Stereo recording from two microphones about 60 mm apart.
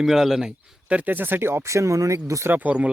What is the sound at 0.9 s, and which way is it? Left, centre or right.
Speech, right.